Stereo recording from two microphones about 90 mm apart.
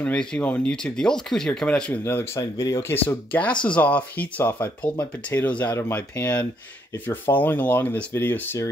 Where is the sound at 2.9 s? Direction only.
15° left (ahead or behind).